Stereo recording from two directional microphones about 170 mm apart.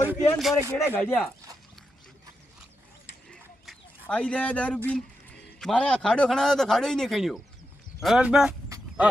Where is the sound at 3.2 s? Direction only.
5° left (ahead or behind).